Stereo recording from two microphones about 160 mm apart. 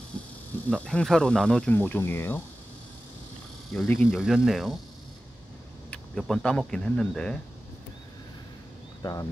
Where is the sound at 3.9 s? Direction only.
10° left (ahead or behind).